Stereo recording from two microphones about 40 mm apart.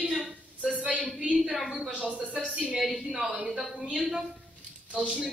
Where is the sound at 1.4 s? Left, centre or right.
Centre.